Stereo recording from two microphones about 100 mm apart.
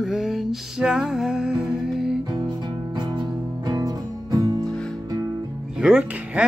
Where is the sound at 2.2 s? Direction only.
45° right (ahead or behind).